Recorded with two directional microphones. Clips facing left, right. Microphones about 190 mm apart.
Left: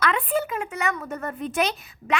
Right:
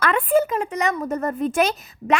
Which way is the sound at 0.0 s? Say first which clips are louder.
Right 6 dB; 50° right (ahead or behind).